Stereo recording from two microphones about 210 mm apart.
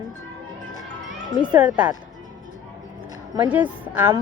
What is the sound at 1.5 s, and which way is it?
Speech, 5° right (ahead or behind).